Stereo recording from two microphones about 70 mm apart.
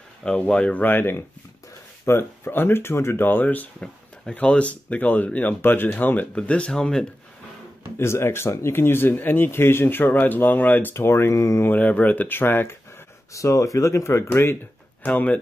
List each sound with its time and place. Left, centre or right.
0.4 s speech: centre
0.8 s speech: left
3.8 s speech: centre
8.0 s speech: left
11.0 s speech: left
11.7 s speech: left
13.3 s speech: left
14.3 s speech: left
15.0 s speech: left